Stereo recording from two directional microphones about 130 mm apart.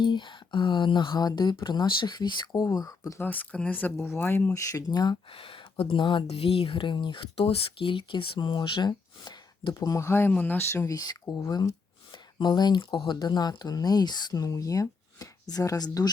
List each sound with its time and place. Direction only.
0.0 s speech: 35° left (ahead or behind)
3.2 s speech: 10° left (ahead or behind)
4.7 s speech: 30° left (ahead or behind)
5.3 s speech: 45° left (ahead or behind)
6.2 s speech: 50° left (ahead or behind); by 11.6 s 25° left (ahead or behind)
12.1 s speech: 35° left (ahead or behind)